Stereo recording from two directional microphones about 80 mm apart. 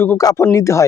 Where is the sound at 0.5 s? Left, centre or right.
Left.